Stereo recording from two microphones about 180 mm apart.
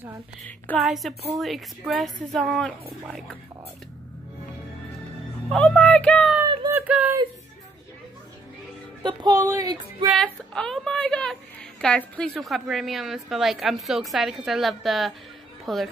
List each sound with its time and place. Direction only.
0.7 s a woman's voice: centre (ahead or behind)
5.5 s a woman's voice: centre (ahead or behind)
6.4 s a sound: 20° right (ahead or behind)
6.9 s speech: 10° right (ahead or behind)
9.0 s music: 20° right (ahead or behind)
10.2 s a woman's voice: 5° left (ahead or behind)